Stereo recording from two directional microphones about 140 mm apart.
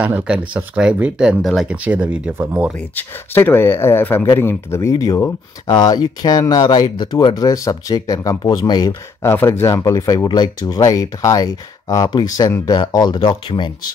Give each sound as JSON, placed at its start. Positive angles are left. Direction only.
{"t": 0.0, "sound": "speech", "side_deg": -10}
{"t": 3.0, "sound": "speech", "side_deg": 15}
{"t": 9.3, "sound": "speech", "side_deg": 15}